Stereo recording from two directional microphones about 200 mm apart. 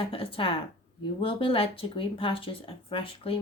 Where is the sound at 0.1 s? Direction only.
25° left (ahead or behind).